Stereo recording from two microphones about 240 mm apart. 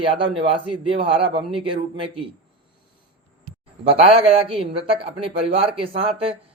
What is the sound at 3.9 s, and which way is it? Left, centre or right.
Speech, right.